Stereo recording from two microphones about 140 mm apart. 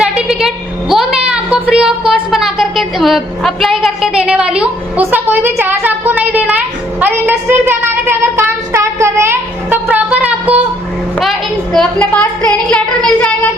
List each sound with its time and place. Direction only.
0.0 s a sound: 5° right (ahead or behind)
2.3 s a woman's voice: centre (ahead or behind)
7.0 s child singing: 15° right (ahead or behind)
11.2 s a child's voice: centre (ahead or behind)
12.5 s child singing: 10° left (ahead or behind)